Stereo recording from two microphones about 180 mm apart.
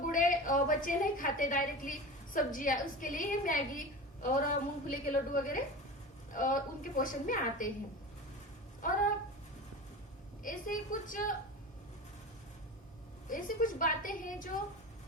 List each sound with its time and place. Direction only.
0.0 s a woman's voice: 50° left (ahead or behind)
8.8 s a woman's voice: 45° left (ahead or behind)
10.4 s a woman's voice: 50° left (ahead or behind)
13.2 s a woman's voice: 50° left (ahead or behind)